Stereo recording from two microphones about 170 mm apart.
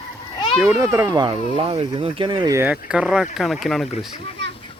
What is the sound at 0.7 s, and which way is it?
Speech, 15° right (ahead or behind).